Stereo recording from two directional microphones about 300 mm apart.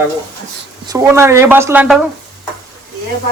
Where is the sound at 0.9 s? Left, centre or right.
Centre.